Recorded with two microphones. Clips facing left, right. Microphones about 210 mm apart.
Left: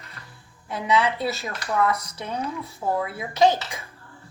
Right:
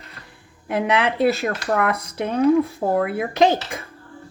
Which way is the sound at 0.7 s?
60° right (ahead or behind).